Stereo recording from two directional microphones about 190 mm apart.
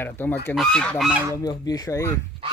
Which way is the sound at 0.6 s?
5° left (ahead or behind).